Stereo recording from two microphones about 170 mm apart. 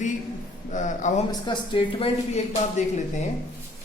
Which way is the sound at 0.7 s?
45° left (ahead or behind).